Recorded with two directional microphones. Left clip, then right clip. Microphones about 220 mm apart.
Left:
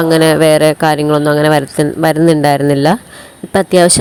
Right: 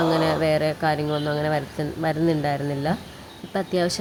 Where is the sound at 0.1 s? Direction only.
40° left (ahead or behind).